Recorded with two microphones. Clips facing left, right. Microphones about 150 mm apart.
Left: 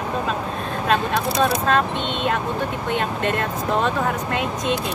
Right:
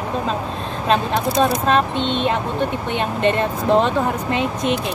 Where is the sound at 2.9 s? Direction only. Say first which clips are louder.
Right 2 dB; 25° right (ahead or behind).